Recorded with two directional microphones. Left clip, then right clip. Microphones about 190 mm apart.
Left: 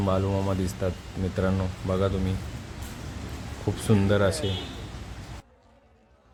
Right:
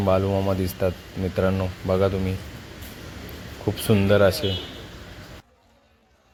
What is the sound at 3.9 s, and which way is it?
Speech, 15° right (ahead or behind).